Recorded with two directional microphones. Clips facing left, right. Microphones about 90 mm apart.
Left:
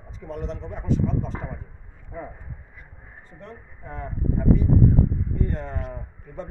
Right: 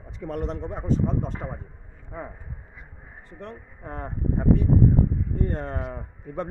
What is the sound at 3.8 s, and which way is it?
Speech, 60° right (ahead or behind).